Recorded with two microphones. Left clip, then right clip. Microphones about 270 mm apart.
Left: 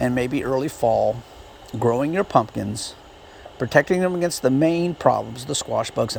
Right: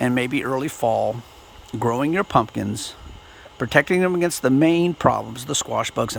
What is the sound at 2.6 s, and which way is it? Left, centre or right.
Speech, right.